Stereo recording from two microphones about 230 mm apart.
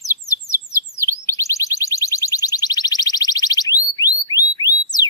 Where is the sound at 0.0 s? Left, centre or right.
Centre.